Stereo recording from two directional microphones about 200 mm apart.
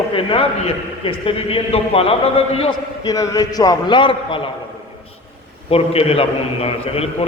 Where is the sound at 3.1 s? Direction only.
15° left (ahead or behind).